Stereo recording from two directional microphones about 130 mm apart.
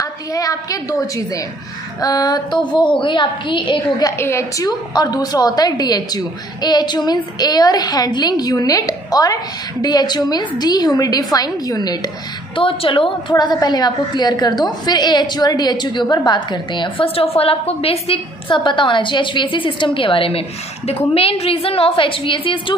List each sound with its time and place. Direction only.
0.0 s a woman's voice: 25° left (ahead or behind)
4.2 s a woman's voice: 20° left (ahead or behind)
12.5 s a woman's voice: 40° left (ahead or behind)
17.0 s a woman's voice: 45° left (ahead or behind)